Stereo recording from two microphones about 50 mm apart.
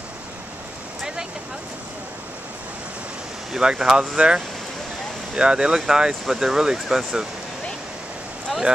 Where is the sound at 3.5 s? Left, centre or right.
Centre.